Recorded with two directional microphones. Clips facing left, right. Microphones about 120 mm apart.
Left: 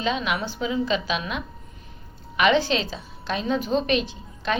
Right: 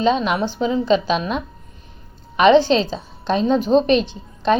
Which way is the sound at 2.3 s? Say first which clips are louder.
Right 8 dB; 30° right (ahead or behind).